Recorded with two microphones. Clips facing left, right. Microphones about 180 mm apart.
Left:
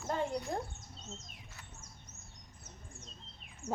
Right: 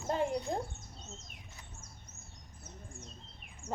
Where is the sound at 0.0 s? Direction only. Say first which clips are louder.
Right 3 dB; 15° right (ahead or behind).